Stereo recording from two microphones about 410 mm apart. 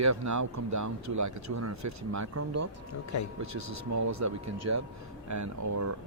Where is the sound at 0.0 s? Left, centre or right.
Right.